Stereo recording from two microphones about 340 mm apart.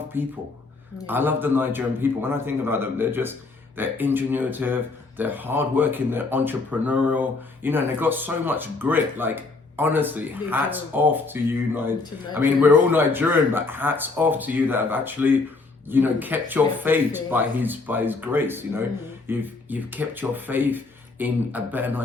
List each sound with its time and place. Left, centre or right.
0.1 s speech: centre